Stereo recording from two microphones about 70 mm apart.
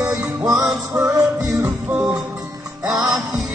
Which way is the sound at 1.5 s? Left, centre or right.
Right.